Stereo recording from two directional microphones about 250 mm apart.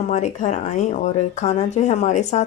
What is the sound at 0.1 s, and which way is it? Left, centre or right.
Speech, left.